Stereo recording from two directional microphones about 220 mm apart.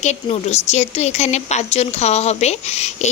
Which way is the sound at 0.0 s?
30° left (ahead or behind).